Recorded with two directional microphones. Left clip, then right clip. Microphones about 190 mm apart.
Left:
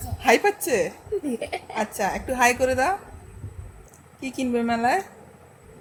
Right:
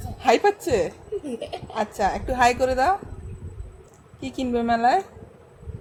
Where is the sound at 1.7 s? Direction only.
5° right (ahead or behind).